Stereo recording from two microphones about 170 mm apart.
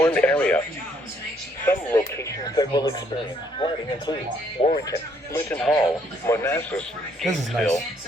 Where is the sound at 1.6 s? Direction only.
15° left (ahead or behind).